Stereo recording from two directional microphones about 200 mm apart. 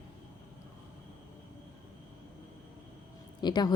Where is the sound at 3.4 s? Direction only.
20° left (ahead or behind).